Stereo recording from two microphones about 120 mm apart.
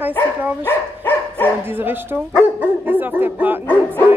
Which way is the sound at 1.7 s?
15° right (ahead or behind).